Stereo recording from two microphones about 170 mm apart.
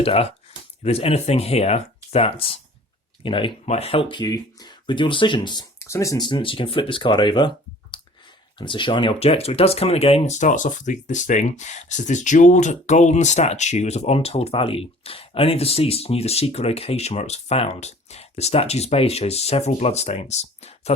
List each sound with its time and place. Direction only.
0.0 s speech: 35° left (ahead or behind)